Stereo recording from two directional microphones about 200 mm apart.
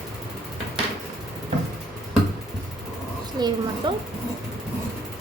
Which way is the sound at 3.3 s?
20° right (ahead or behind).